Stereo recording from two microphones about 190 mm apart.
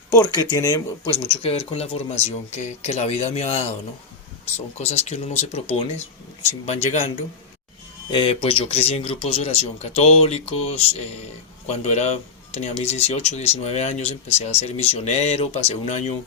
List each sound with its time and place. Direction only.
0.5 s speech: 20° left (ahead or behind)
4.8 s speech: 35° left (ahead or behind)
6.0 s speech: 10° left (ahead or behind)
6.8 s speech: 35° left (ahead or behind)
8.1 s speech: 25° left (ahead or behind)